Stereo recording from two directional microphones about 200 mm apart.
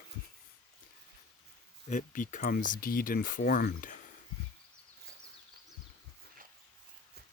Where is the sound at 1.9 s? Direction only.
40° left (ahead or behind).